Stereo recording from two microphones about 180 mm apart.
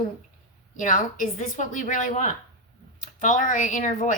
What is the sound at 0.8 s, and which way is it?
A woman's voice, 45° left (ahead or behind).